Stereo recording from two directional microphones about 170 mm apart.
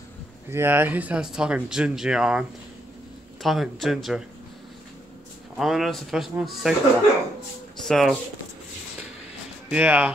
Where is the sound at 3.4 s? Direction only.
Centre (ahead or behind).